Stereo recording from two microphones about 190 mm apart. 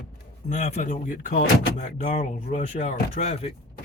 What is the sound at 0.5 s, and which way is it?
Speech, 40° left (ahead or behind).